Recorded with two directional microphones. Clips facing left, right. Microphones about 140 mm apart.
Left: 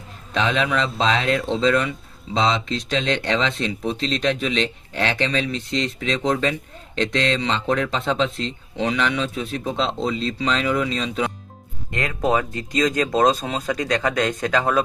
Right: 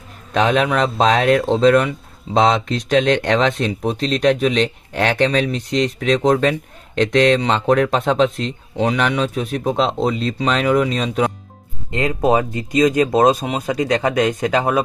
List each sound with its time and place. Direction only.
0.3 s speech: 50° right (ahead or behind)
11.9 s speech: 20° right (ahead or behind)